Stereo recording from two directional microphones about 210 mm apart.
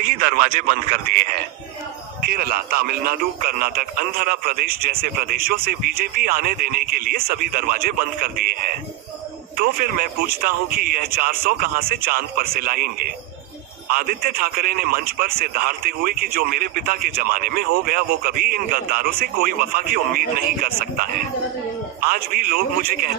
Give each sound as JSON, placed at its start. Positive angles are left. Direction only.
{"t": 0.4, "sound": "a man's voice", "side_deg": -40}
{"t": 22.1, "sound": "a man's voice", "side_deg": -45}